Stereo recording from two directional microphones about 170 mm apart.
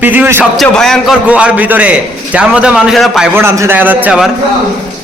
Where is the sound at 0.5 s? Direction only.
Centre (ahead or behind).